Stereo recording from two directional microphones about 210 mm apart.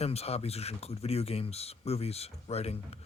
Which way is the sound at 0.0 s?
30° left (ahead or behind).